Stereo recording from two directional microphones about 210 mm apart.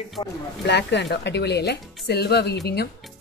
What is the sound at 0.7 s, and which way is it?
Speech, 55° left (ahead or behind).